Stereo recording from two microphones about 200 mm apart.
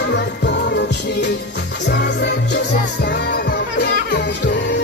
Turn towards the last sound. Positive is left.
turn(degrees=55)  # may be behind; listen again after turning